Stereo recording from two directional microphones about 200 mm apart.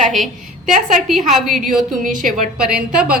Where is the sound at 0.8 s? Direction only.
Centre (ahead or behind).